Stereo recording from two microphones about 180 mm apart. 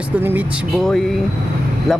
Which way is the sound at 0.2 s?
10° right (ahead or behind).